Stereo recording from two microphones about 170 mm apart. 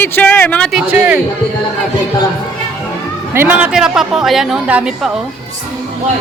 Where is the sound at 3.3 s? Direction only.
10° right (ahead or behind).